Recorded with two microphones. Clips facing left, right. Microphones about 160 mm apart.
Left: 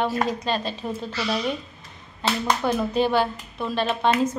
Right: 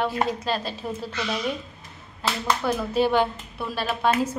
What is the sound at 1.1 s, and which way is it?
Speech, 35° left (ahead or behind).